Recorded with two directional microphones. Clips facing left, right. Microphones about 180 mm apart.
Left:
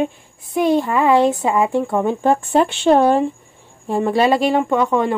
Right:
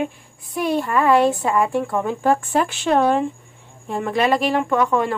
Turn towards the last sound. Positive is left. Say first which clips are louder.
# left 2 dB
turn(degrees=25)  # may be behind; listen again after turning